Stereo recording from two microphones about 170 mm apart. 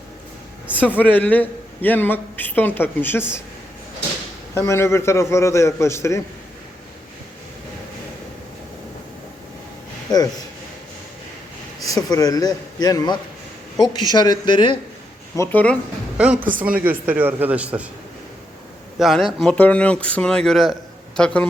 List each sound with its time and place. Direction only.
0.7 s speech: 10° right (ahead or behind)
0.9 s a man's voice: 10° left (ahead or behind)
4.5 s a man's voice: 15° left (ahead or behind)
11.9 s a man's voice: 25° left (ahead or behind)
15.4 s a man's voice: 10° left (ahead or behind)
16.1 s speech: 5° right (ahead or behind)
18.9 s a man's voice: centre (ahead or behind)